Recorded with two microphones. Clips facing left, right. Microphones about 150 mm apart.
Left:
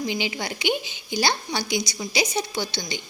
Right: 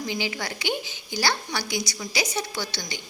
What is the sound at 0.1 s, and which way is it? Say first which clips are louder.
A woman's voice: left 2 dB; 20° left (ahead or behind).